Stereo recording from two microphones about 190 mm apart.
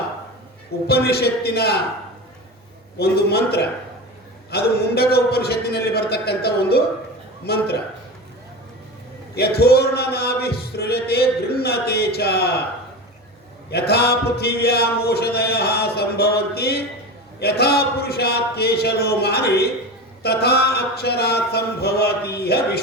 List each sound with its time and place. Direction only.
0.9 s a man's voice: 55° left (ahead or behind)
3.0 s a man's voice: 55° left (ahead or behind)
9.3 s a man's voice: 55° left (ahead or behind)
13.7 s a man's voice: 60° left (ahead or behind)